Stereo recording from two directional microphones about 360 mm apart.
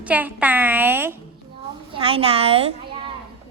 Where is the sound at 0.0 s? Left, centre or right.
Centre.